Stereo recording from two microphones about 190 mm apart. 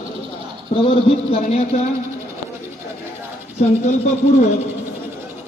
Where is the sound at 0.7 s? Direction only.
30° left (ahead or behind).